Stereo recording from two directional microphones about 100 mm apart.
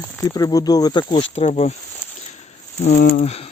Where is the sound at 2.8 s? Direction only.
90° left.